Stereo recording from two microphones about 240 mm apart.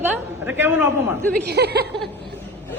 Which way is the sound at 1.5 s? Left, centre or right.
Right.